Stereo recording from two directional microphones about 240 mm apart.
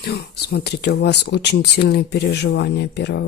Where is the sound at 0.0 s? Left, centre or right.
Left.